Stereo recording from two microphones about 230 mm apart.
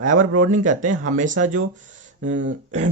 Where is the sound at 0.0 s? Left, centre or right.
Right.